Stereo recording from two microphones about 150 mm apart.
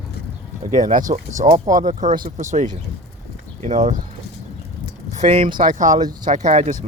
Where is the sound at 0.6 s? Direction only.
65° right (ahead or behind).